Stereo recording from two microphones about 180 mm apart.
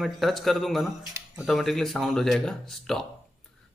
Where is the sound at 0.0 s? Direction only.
Centre (ahead or behind).